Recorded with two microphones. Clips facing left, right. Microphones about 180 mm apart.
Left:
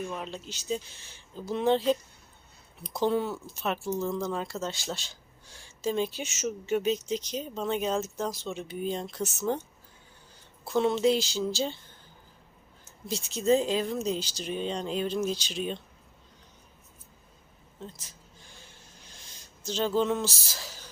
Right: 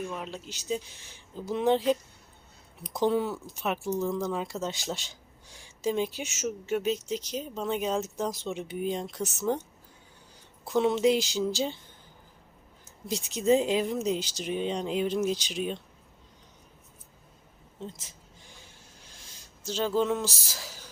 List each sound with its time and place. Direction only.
0.1 s speech: 5° right (ahead or behind)
10.6 s speech: 15° right (ahead or behind)
13.1 s speech: 15° right (ahead or behind)
17.7 s speech: 20° right (ahead or behind)
19.6 s speech: 5° right (ahead or behind)